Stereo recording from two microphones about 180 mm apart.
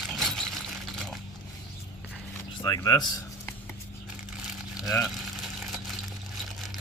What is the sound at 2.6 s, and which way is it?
Speech, 20° left (ahead or behind).